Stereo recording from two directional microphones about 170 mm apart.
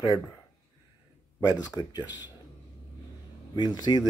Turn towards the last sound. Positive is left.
turn(degrees=25)  # may be behind; listen again after turning